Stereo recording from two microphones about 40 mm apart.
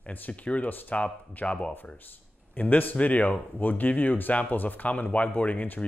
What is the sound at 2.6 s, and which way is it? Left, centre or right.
Speech, left.